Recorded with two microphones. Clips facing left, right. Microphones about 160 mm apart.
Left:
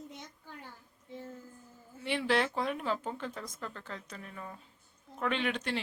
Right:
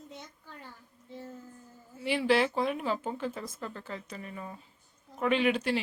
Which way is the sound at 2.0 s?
5° right (ahead or behind).